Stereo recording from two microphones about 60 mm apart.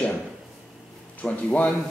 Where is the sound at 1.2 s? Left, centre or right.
Left.